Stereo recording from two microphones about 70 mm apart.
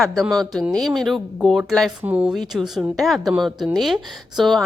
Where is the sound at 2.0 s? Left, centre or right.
Centre.